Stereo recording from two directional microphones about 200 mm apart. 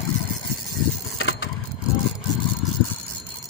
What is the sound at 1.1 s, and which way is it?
Vehicle, 65° left (ahead or behind).